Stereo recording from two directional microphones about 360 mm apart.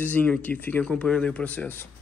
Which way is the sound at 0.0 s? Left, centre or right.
Centre.